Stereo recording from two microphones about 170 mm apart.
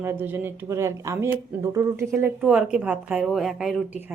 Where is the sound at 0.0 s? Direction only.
15° right (ahead or behind).